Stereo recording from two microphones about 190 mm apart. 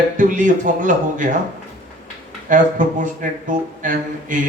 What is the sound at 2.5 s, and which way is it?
A man's voice, 40° right (ahead or behind).